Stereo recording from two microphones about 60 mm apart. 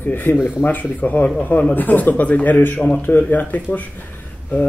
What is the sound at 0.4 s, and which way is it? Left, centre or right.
Speech, centre.